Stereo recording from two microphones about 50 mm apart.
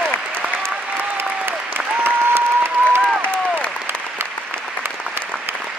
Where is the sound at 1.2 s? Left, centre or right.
Right.